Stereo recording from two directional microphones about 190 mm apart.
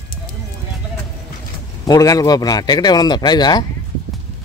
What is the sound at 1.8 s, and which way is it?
Speech, 20° left (ahead or behind).